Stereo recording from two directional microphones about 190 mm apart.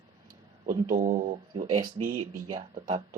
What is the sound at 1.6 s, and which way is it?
Speech, 20° right (ahead or behind).